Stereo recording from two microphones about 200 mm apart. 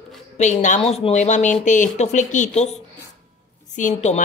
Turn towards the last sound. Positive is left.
turn(degrees=40)  # may be behind; listen again after turning